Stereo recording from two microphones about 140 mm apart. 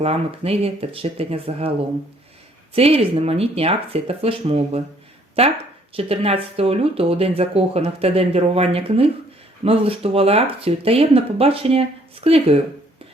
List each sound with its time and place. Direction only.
0.0 s speech: 45° right (ahead or behind)
2.7 s speech: 45° right (ahead or behind)